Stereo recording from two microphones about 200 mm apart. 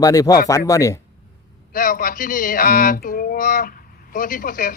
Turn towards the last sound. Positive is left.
turn(degrees=45)  # may be behind; listen again after turning